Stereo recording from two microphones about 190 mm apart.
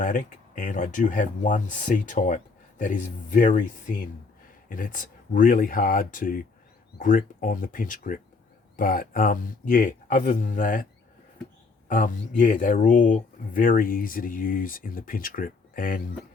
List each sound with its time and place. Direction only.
0.0 s speech: 45° left (ahead or behind)
11.9 s speech: 45° left (ahead or behind)